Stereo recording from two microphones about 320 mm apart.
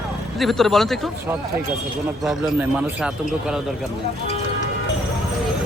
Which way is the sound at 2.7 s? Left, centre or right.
Centre.